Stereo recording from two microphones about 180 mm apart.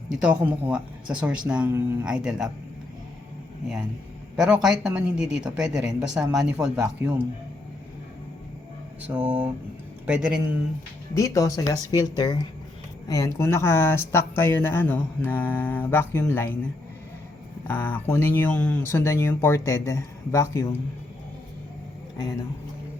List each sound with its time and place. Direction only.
0.1 s a woman's voice: 5° right (ahead or behind)
4.4 s a woman's voice: 5° right (ahead or behind)
9.0 s a sound: 10° right (ahead or behind)
10.1 s a woman's voice: 5° right (ahead or behind)
11.1 s speech: 20° left (ahead or behind)
17.7 s speech: 10° left (ahead or behind)